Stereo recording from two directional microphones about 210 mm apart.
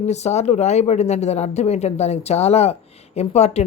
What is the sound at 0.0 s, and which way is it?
A woman's voice, 30° left (ahead or behind).